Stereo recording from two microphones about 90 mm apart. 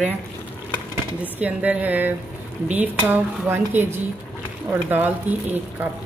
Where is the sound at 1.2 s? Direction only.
15° right (ahead or behind).